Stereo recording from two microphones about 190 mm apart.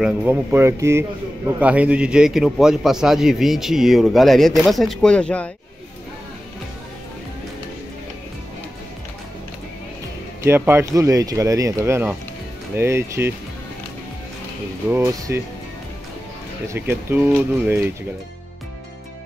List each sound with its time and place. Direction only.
0.0 s a man's voice: 10° right (ahead or behind)
10.4 s speech: 10° right (ahead or behind)
14.9 s speech: 15° right (ahead or behind)
16.6 s speech: 10° right (ahead or behind)